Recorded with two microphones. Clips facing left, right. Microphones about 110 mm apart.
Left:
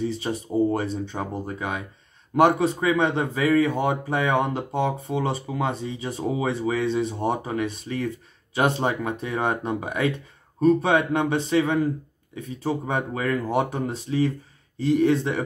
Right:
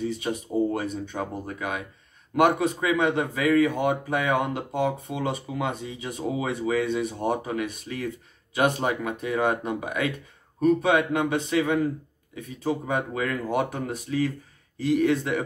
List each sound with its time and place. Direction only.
0.0 s speech: 30° left (ahead or behind)